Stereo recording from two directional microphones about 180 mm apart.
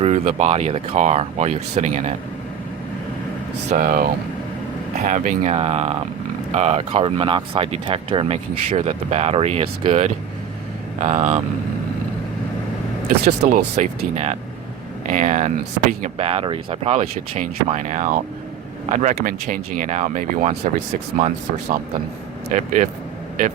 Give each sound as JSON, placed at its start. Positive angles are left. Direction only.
{"t": 0.0, "sound": "speech", "side_deg": -40}
{"t": 3.7, "sound": "speech", "side_deg": -50}
{"t": 13.2, "sound": "speech", "side_deg": -60}
{"t": 13.7, "sound": "speech", "side_deg": -40}
{"t": 16.2, "sound": "speech", "side_deg": -35}
{"t": 22.5, "sound": "speech", "side_deg": -45}